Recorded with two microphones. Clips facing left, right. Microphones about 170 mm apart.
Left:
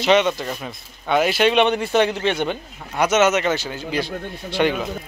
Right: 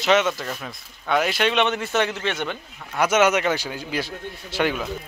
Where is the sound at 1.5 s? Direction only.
15° left (ahead or behind).